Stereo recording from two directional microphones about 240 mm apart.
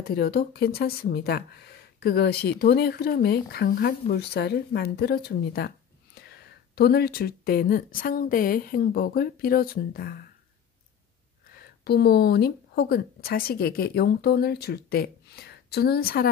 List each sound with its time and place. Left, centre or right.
0.0 s speech: left
11.8 s speech: left